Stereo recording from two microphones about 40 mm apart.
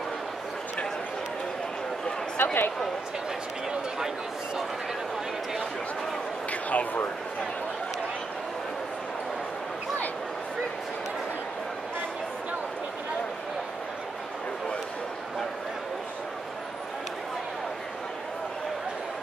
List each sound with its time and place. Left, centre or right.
2.3 s speech: left
6.5 s a man's voice: left